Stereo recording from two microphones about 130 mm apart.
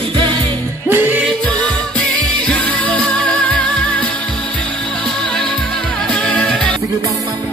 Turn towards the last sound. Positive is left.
turn(degrees=10)  # may be behind; listen again after turning